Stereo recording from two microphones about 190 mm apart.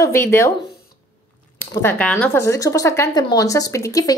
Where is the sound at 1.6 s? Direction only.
10° left (ahead or behind).